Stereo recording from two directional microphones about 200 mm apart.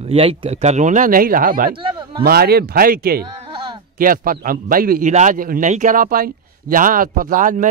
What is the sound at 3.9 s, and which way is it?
Speech, 45° right (ahead or behind).